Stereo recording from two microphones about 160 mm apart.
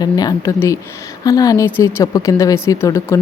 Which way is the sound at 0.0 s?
25° left (ahead or behind).